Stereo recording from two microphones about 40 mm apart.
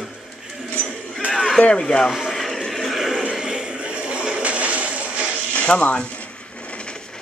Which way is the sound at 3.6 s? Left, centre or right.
Right.